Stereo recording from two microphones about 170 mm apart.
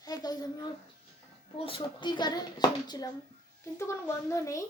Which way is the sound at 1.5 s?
30° left (ahead or behind).